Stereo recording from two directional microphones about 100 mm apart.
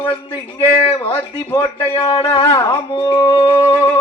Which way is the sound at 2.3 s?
60° left (ahead or behind).